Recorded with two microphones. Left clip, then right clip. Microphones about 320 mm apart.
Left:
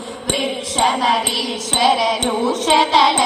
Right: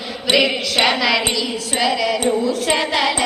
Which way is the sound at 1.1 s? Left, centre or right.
Centre.